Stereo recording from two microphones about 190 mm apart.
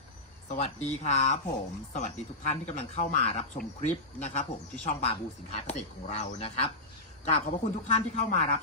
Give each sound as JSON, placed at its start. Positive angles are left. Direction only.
{"t": 0.4, "sound": "speech", "side_deg": 35}